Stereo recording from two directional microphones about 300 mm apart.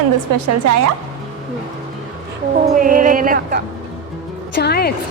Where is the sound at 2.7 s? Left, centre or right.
Right.